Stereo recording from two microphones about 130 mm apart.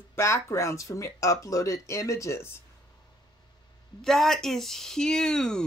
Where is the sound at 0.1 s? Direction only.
20° left (ahead or behind).